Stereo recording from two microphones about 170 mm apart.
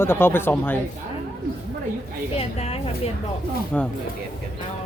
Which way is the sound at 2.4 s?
35° left (ahead or behind).